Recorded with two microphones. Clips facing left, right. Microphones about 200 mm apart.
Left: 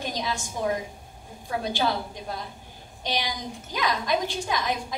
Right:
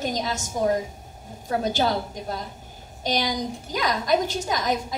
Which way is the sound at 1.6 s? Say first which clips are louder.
Right 3 dB; 40° right (ahead or behind).